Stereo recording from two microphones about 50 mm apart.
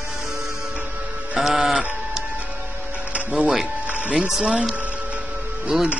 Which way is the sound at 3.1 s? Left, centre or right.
Right.